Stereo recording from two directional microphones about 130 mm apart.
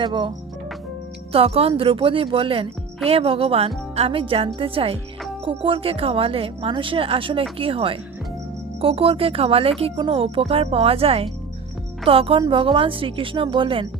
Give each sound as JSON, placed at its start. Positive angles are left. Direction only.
{"t": 0.0, "sound": "speech", "side_deg": -35}
{"t": 1.3, "sound": "speech", "side_deg": -50}